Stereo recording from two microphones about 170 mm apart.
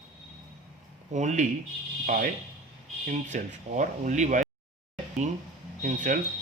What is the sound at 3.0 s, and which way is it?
Speech, 45° right (ahead or behind).